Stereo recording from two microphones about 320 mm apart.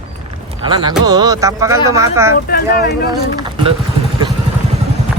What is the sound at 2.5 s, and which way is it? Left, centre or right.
Speech, left.